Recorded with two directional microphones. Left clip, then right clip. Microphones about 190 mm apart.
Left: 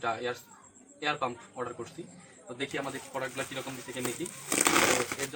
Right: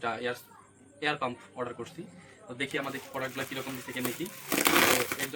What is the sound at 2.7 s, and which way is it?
Speech, 10° right (ahead or behind).